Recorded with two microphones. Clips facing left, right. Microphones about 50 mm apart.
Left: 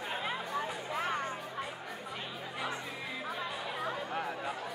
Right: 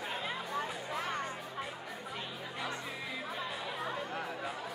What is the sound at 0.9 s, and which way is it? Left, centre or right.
Music, centre.